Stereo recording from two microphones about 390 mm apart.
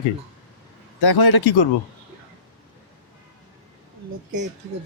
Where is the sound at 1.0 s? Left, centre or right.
Left.